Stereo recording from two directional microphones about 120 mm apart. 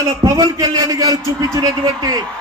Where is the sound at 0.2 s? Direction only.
30° right (ahead or behind).